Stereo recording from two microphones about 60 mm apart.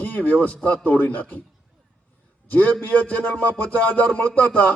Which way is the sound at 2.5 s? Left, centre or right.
Left.